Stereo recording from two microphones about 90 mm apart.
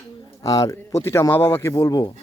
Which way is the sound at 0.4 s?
40° left (ahead or behind).